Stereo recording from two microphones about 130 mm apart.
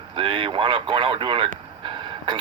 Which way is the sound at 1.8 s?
40° right (ahead or behind).